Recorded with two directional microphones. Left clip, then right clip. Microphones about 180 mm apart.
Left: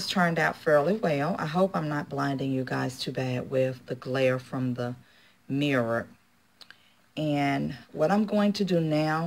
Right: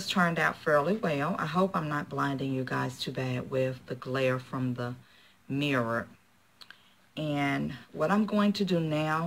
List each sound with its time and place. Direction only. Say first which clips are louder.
0.0 s speech: left 2 dB; 25° left (ahead or behind)